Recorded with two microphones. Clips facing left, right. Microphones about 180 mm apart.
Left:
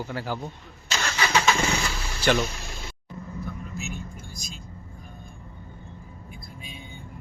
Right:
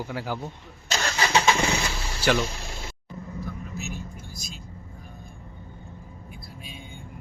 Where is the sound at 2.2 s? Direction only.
10° right (ahead or behind).